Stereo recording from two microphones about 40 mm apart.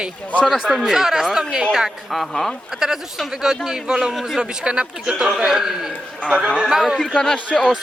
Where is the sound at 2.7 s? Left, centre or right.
Centre.